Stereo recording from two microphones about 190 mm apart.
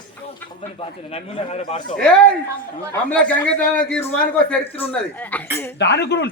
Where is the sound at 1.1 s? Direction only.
30° left (ahead or behind).